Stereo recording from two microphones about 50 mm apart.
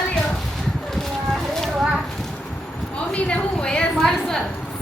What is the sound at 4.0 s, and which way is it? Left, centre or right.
Speech, centre.